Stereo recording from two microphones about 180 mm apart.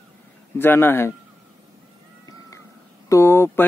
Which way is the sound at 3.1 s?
15° left (ahead or behind).